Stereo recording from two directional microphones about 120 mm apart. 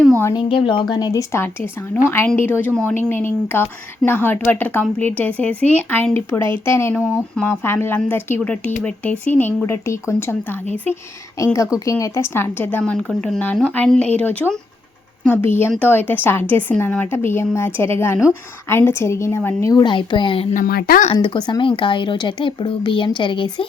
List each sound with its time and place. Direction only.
0.3 s a woman's voice: 45° left (ahead or behind); by 6.5 s 5° left (ahead or behind)
6.7 s a woman's voice: 20° left (ahead or behind)
11.9 s a woman's voice: 25° left (ahead or behind)
19.8 s speech: 40° left (ahead or behind)
20.5 s speech: 90° left
21.1 s speech: 45° left (ahead or behind)